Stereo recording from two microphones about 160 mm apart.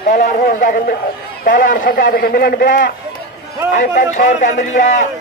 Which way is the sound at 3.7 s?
55° left (ahead or behind).